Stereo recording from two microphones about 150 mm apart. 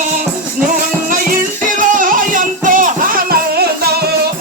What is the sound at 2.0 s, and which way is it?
Music, 65° right (ahead or behind).